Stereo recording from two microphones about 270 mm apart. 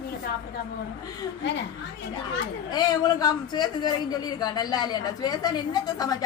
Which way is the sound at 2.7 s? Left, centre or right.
Centre.